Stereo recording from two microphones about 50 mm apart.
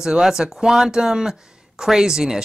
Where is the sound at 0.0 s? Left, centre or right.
Centre.